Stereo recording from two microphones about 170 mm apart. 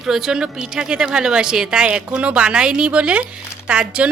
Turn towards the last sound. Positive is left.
turn(degrees=-5)  # may be behind; listen again after turning